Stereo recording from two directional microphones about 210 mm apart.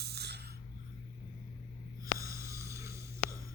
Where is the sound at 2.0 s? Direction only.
15° right (ahead or behind).